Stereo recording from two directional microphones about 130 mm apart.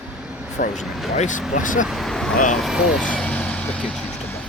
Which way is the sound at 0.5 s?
70° left (ahead or behind).